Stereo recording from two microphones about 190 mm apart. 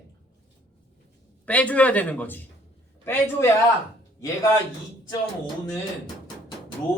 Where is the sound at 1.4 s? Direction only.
5° left (ahead or behind).